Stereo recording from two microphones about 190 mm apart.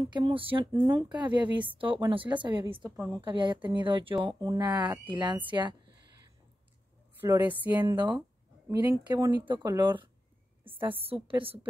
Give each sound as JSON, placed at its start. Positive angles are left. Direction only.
{"t": 0.1, "sound": "speech", "side_deg": -30}
{"t": 0.7, "sound": "a woman's voice", "side_deg": -15}
{"t": 7.2, "sound": "a woman's voice", "side_deg": -10}
{"t": 7.8, "sound": "speech", "side_deg": -25}